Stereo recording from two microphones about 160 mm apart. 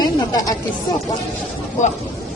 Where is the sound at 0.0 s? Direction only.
25° left (ahead or behind).